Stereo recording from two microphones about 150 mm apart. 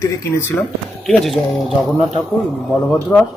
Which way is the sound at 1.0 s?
Centre (ahead or behind).